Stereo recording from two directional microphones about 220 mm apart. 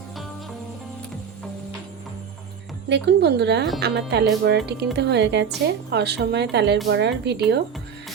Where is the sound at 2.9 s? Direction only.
50° right (ahead or behind).